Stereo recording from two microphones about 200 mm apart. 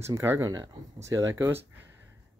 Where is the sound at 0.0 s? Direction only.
10° right (ahead or behind).